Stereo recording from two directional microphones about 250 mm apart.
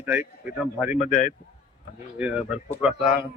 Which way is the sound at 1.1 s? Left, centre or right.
Left.